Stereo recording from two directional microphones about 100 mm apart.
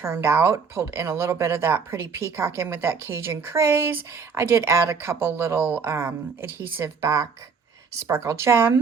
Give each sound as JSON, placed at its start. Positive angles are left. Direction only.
{"t": 0.0, "sound": "speech", "side_deg": -25}